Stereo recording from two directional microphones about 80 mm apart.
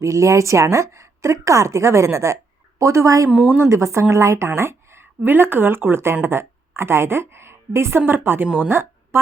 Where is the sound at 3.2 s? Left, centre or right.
Right.